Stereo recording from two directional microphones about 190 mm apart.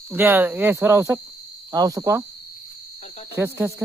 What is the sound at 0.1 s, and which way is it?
Speech, 10° right (ahead or behind).